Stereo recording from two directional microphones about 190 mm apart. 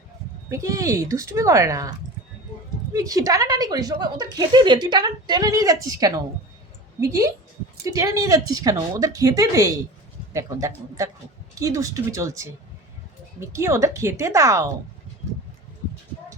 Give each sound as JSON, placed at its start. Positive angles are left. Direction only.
{"t": 0.5, "sound": "a woman's voice", "side_deg": -15}